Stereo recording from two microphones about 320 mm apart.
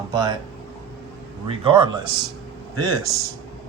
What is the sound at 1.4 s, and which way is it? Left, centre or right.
Speech, centre.